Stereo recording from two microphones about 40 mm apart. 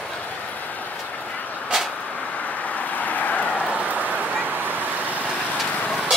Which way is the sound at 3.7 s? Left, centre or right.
Right.